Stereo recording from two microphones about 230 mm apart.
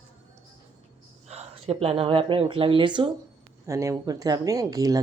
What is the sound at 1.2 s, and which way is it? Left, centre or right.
Speech, right.